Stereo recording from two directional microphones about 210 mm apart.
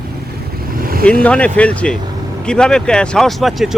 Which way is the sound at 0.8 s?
45° right (ahead or behind).